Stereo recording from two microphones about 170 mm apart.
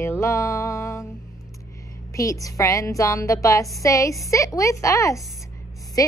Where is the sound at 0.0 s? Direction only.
15° left (ahead or behind).